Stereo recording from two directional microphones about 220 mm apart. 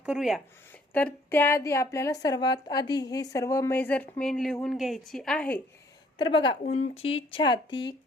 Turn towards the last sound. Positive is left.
turn(degrees=20)  # may be behind; listen again after turning